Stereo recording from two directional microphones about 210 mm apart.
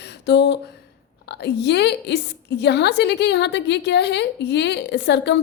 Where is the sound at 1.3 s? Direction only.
55° left (ahead or behind).